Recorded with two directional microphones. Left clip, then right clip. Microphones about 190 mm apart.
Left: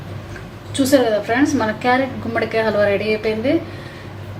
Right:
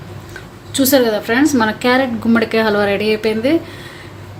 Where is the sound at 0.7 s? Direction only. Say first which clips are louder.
Right 2 dB; 40° right (ahead or behind).